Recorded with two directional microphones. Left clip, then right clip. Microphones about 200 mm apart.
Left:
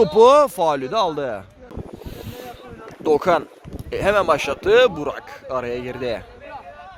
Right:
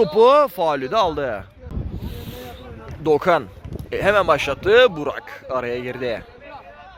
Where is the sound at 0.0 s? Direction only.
10° left (ahead or behind).